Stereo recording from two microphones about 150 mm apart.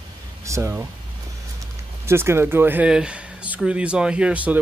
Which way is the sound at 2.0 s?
15° right (ahead or behind).